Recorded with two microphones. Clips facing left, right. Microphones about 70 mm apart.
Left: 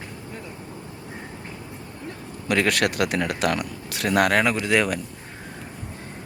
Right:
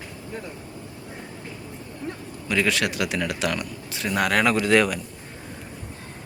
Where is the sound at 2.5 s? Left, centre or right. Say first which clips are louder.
Left 2 dB; left.